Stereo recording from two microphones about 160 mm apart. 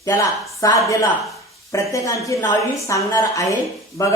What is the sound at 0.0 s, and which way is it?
Speech, 20° left (ahead or behind).